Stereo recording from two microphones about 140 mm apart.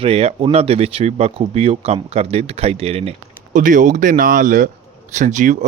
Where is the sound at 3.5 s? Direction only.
70° right (ahead or behind).